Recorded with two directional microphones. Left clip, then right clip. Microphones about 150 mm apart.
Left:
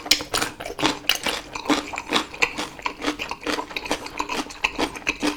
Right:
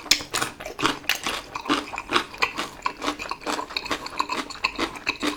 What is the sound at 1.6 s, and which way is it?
Biting, 45° left (ahead or behind).